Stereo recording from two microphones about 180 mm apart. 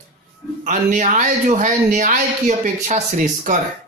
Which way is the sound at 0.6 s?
45° right (ahead or behind).